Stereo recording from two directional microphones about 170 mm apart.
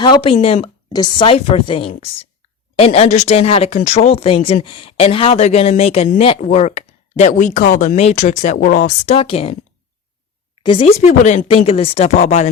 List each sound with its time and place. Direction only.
0.0 s speech: 30° left (ahead or behind); by 9.1 s 50° left (ahead or behind)
9.1 s speech: 35° left (ahead or behind)
10.6 s speech: 30° left (ahead or behind)
11.2 s speech: 50° left (ahead or behind)
11.4 s speech: 35° left (ahead or behind)